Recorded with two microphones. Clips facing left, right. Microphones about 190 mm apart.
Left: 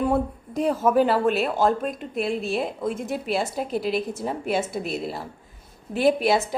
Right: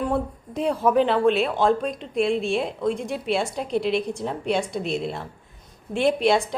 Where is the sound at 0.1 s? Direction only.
Centre (ahead or behind).